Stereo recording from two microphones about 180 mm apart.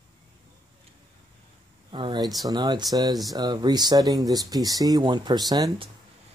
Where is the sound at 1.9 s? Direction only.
25° right (ahead or behind).